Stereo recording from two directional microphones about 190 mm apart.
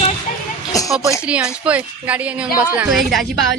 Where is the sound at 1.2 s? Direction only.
5° right (ahead or behind).